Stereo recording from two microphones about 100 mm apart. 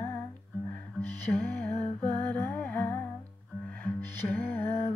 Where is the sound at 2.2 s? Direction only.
20° left (ahead or behind).